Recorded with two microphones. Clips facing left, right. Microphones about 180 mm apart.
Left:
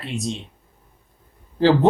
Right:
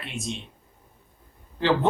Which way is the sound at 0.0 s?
35° left (ahead or behind).